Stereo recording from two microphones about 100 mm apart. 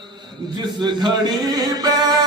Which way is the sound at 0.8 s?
45° right (ahead or behind).